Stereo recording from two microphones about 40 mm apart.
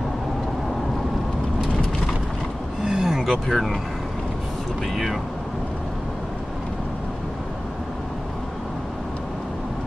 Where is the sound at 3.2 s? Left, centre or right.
Centre.